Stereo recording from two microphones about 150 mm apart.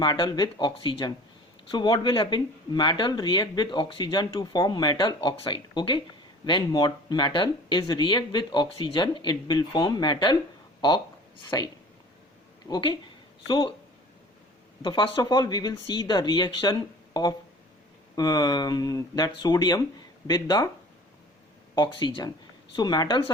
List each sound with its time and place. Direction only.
0.0 s speech: 30° left (ahead or behind)
10.8 s a sound: 30° left (ahead or behind)
11.5 s speech: 25° left (ahead or behind)
14.8 s speech: 30° left (ahead or behind)
18.2 s speech: 25° left (ahead or behind)
21.8 s speech: 30° left (ahead or behind)